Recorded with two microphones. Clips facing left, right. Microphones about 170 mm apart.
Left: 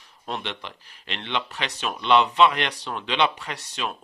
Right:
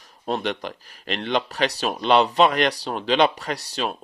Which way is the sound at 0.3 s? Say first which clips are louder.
Right 7 dB; 40° right (ahead or behind).